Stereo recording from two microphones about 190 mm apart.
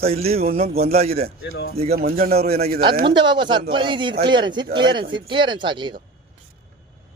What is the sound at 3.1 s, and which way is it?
Speech, 25° right (ahead or behind).